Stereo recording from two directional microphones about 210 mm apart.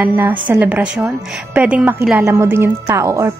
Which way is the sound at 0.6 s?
5° right (ahead or behind).